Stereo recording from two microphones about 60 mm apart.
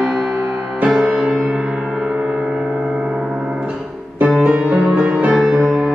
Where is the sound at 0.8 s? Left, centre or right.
Centre.